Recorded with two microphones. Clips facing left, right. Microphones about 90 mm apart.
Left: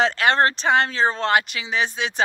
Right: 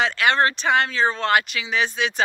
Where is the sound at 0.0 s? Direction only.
35° left (ahead or behind).